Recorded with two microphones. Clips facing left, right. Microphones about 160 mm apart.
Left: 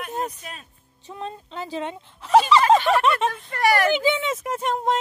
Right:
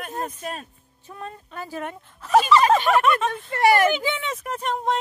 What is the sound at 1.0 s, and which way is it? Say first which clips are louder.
Speech: left 3 dB; 20° left (ahead or behind).